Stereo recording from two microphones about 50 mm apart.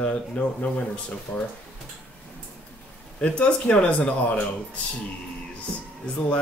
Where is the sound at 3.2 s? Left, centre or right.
Left.